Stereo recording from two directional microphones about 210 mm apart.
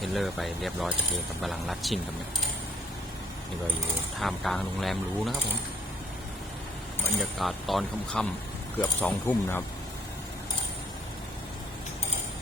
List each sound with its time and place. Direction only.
0.0 s speech: centre (ahead or behind)
4.2 s speech: centre (ahead or behind)
7.2 s speech: centre (ahead or behind)